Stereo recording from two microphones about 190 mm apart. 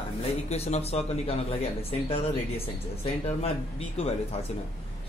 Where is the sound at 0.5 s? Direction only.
35° left (ahead or behind).